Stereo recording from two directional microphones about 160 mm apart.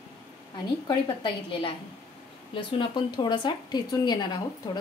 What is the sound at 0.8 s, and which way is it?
A woman's voice, 30° left (ahead or behind).